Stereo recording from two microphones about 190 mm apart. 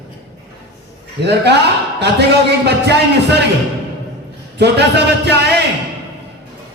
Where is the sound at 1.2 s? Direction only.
60° right (ahead or behind).